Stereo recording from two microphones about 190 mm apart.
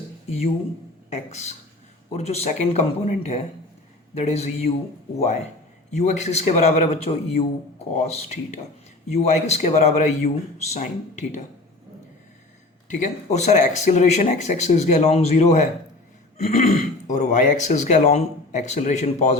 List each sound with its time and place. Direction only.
1.1 s speech: 35° left (ahead or behind)
12.9 s speech: 40° left (ahead or behind)